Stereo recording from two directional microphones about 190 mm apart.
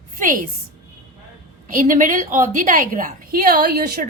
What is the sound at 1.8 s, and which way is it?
A woman's voice, 45° right (ahead or behind).